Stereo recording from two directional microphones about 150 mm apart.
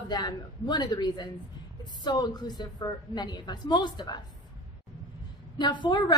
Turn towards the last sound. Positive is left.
turn(degrees=30)  # may be behind; listen again after turning